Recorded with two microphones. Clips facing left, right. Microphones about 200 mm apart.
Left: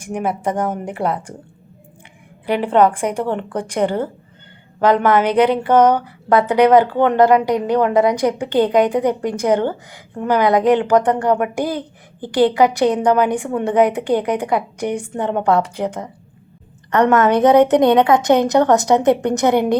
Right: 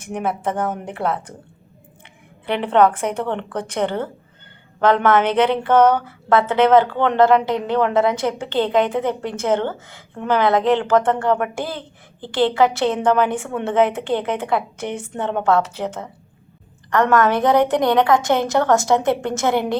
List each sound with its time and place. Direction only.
0.0 s a woman's voice: 10° left (ahead or behind)
2.5 s a woman's voice: 10° left (ahead or behind)
15.2 s a woman's voice: centre (ahead or behind)
16.9 s a woman's voice: 20° left (ahead or behind)